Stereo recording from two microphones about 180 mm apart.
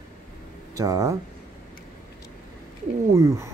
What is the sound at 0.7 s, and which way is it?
Speech, 20° right (ahead or behind).